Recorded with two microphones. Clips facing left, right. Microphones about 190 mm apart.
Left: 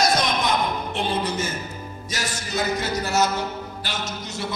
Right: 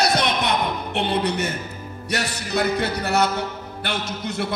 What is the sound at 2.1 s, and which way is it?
A man's voice, 65° right (ahead or behind).